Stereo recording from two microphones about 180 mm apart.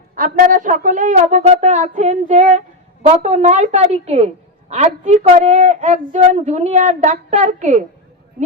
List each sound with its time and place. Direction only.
0.2 s a woman's voice: 50° right (ahead or behind)